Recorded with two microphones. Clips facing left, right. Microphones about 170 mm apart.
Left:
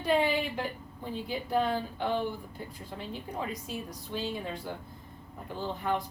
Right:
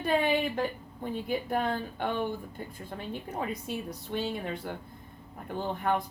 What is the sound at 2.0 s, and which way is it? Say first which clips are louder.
Speech: left 1 dB; 55° right (ahead or behind).